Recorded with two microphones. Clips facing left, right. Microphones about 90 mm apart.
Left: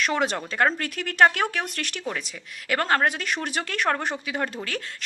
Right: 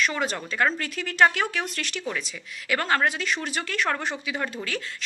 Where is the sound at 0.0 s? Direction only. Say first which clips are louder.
Left 2 dB; 65° left (ahead or behind).